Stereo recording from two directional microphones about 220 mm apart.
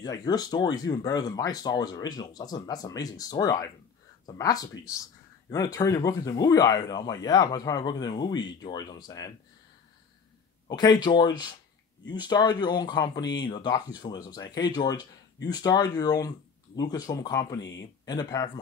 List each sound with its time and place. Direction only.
0.0 s speech: 15° left (ahead or behind)
10.7 s speech: 20° left (ahead or behind)
17.6 s speech: 55° left (ahead or behind)
18.0 s speech: 20° left (ahead or behind)